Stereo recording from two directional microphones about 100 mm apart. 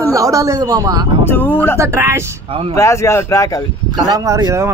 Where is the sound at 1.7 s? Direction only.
25° right (ahead or behind).